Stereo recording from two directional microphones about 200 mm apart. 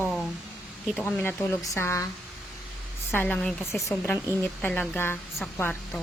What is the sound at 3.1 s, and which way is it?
Speech, 10° left (ahead or behind).